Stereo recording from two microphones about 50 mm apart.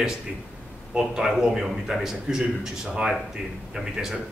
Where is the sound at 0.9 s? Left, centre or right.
Centre.